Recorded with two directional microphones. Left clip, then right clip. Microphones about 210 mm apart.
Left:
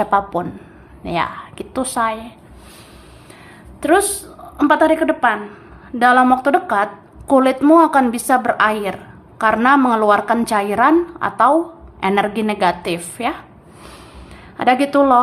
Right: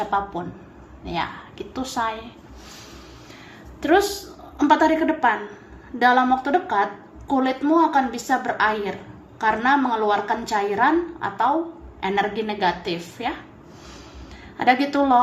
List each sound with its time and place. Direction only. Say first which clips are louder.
0.0 s a woman's voice: left 7 dB; 25° left (ahead or behind)
3.8 s a woman's voice: left 4 dB; 20° left (ahead or behind)
14.6 s a woman's voice: left 5 dB; 25° left (ahead or behind)